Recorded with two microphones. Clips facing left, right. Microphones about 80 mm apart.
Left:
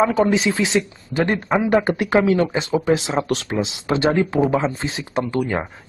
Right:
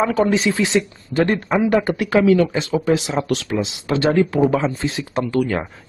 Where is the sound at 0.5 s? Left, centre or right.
Centre.